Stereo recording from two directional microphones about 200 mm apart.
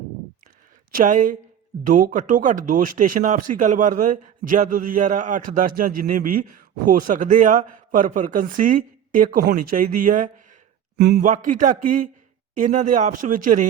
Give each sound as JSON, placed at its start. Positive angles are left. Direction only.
{"t": 0.9, "sound": "speech", "side_deg": -40}
{"t": 10.9, "sound": "a man's voice", "side_deg": -55}
{"t": 11.2, "sound": "speech", "side_deg": -40}